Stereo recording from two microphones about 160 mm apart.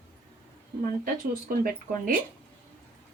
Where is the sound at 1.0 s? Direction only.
60° right (ahead or behind).